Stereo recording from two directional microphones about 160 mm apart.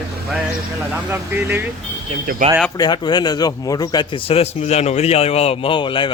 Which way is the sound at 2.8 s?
25° left (ahead or behind).